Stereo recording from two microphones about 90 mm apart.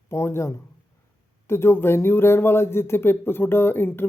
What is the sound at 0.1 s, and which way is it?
Speech, 30° left (ahead or behind).